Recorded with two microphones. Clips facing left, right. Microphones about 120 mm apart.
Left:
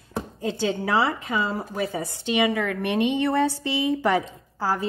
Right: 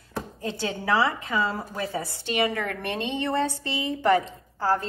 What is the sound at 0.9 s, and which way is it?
A woman's voice, 25° left (ahead or behind).